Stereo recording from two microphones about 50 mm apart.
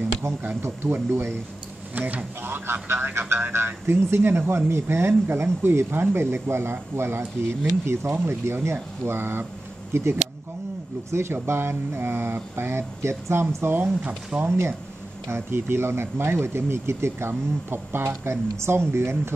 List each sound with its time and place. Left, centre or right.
0.8 s speech: right
2.0 s speech: right
2.4 s speech: right
9.0 s speech: right
9.9 s speech: right
14.3 s speech: right
15.2 s speech: right